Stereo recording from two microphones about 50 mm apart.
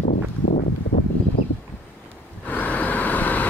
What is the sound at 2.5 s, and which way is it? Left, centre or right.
Vehicle, left.